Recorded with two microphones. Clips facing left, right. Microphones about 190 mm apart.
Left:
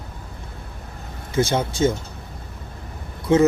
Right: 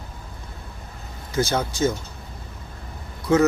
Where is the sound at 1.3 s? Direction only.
25° left (ahead or behind).